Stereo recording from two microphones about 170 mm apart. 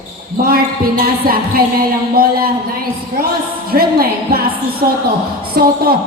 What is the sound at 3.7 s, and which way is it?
A woman's voice, 60° right (ahead or behind).